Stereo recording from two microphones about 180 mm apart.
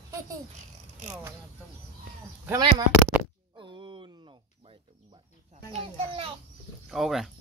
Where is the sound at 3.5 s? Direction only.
25° right (ahead or behind).